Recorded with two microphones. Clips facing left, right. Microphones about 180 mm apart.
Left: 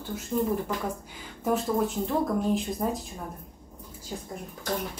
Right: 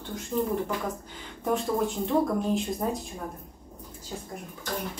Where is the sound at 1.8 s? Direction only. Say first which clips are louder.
Right 1 dB; centre (ahead or behind).